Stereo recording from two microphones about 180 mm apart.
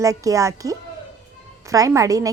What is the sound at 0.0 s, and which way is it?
A woman's voice, 20° right (ahead or behind).